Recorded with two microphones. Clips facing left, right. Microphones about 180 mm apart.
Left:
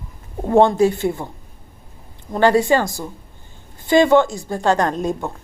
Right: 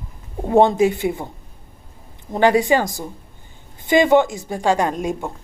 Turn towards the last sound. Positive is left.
turn(degrees=-10)  # may be behind; listen again after turning